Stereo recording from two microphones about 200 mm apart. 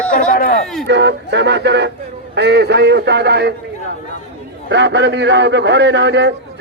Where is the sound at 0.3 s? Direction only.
45° left (ahead or behind).